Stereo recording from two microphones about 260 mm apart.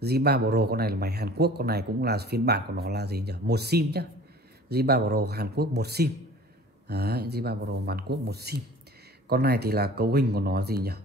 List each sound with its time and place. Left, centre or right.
0.0 s speech: right